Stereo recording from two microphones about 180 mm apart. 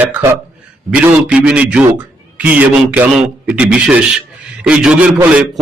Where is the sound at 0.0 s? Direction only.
10° right (ahead or behind).